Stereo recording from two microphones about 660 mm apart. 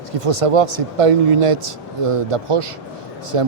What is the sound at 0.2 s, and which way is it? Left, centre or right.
Speech, right.